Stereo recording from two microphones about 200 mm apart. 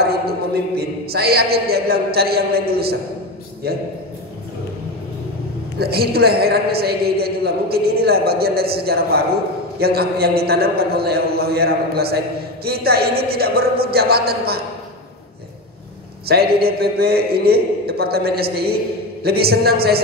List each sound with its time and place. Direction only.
0.0 s a woman's voice: 50° right (ahead or behind)
5.8 s a woman's voice: 50° right (ahead or behind)
16.3 s a woman's voice: 50° right (ahead or behind)